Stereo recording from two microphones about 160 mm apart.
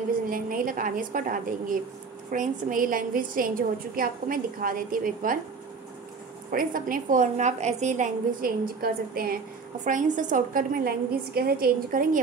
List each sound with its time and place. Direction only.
0.3 s a woman's voice: 60° right (ahead or behind)
6.5 s a woman's voice: 60° right (ahead or behind)
9.8 s a woman's voice: 50° right (ahead or behind)